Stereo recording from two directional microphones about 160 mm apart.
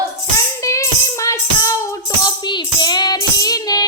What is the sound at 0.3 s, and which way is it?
Music, 20° left (ahead or behind).